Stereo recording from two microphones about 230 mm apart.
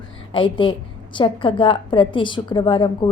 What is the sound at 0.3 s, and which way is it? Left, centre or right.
A woman's voice, left.